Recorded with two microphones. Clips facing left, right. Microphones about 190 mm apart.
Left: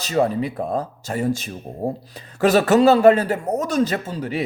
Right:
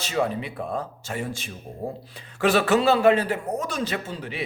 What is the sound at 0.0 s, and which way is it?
Speech, 40° left (ahead or behind).